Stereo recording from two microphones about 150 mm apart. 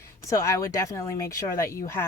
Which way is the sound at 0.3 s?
20° left (ahead or behind).